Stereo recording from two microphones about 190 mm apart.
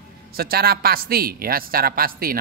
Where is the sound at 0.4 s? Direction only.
55° right (ahead or behind).